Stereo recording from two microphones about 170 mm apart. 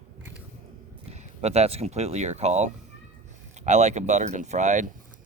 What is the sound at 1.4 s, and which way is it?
Speech, 40° right (ahead or behind).